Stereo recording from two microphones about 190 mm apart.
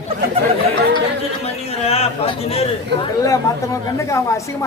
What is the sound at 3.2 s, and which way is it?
Speech, 15° left (ahead or behind).